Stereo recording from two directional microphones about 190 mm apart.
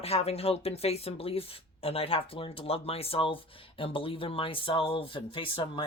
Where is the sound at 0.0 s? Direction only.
30° left (ahead or behind).